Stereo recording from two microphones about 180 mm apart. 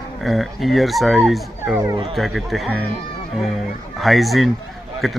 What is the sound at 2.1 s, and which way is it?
Speech, centre (ahead or behind).